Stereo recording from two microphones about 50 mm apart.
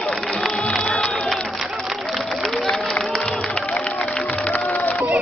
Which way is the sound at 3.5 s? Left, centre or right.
Left.